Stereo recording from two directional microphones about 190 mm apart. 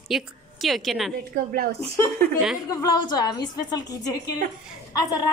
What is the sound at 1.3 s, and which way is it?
Speech, 50° right (ahead or behind).